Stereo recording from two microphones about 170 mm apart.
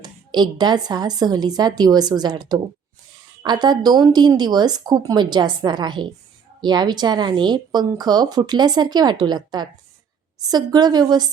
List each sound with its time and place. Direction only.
0.0 s speech: 25° right (ahead or behind)